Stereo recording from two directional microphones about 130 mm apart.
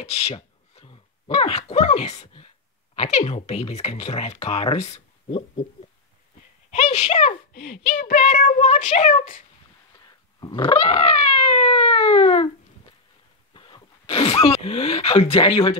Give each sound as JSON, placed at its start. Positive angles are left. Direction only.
{"t": 0.0, "sound": "a sound", "side_deg": 50}
{"t": 1.7, "sound": "speech", "side_deg": 55}
{"t": 6.7, "sound": "speech", "side_deg": 55}
{"t": 7.9, "sound": "speech", "side_deg": 90}
{"t": 9.9, "sound": "dog", "side_deg": 30}
{"t": 13.5, "sound": "speech", "side_deg": 40}